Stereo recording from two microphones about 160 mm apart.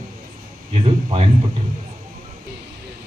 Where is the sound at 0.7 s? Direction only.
40° right (ahead or behind).